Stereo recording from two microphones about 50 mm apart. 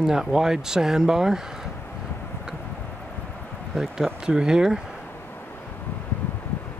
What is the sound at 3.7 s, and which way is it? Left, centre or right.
Speech, centre.